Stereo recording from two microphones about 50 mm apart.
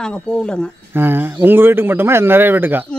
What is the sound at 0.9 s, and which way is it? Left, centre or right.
Speech, right.